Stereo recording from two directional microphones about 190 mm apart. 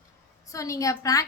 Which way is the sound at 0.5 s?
15° left (ahead or behind).